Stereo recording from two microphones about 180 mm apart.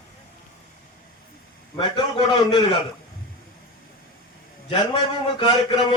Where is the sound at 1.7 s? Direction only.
25° left (ahead or behind).